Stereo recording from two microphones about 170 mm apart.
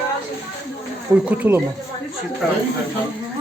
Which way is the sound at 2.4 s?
Centre (ahead or behind).